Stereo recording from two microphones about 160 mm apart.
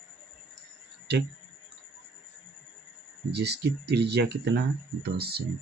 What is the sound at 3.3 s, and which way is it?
Speech, 90° right.